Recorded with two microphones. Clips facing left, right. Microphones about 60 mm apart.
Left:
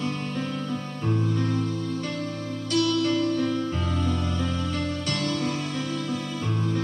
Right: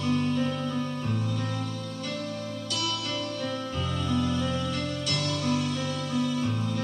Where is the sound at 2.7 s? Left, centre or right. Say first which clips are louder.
Left 11 dB; left.